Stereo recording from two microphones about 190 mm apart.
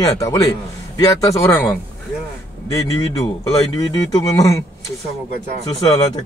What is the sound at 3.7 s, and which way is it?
Speech, 15° left (ahead or behind).